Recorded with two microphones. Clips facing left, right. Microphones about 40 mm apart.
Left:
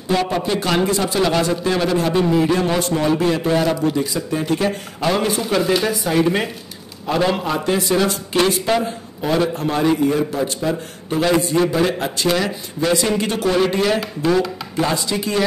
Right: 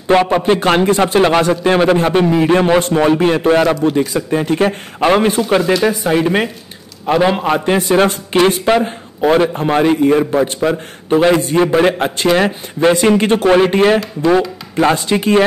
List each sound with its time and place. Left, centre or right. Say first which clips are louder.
0.1 s a man's voice: right 8 dB; right
2.2 s a man's voice: right 5 dB; right
5.9 s speech: right 4 dB; right
7.4 s a man's voice: right 5 dB; right
11.1 s a man's voice: right 5 dB; right